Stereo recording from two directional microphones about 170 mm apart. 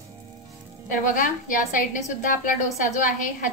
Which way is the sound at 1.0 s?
50° left (ahead or behind).